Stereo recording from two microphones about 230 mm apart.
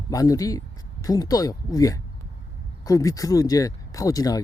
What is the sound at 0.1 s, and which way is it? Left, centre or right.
Speech, centre.